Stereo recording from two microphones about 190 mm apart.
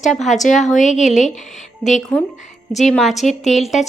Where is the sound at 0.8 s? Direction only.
40° left (ahead or behind).